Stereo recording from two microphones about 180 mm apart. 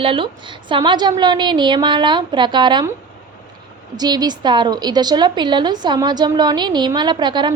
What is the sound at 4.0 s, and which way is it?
A woman's voice, 20° right (ahead or behind).